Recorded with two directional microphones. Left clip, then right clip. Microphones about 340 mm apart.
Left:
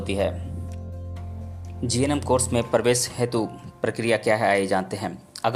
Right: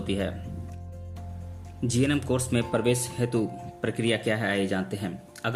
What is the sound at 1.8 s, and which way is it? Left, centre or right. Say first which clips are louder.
Speech: left 4 dB; centre.